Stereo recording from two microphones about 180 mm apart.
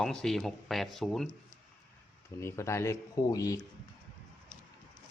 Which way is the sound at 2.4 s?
15° left (ahead or behind).